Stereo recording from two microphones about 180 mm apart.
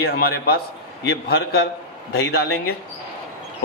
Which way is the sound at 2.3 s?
60° left (ahead or behind).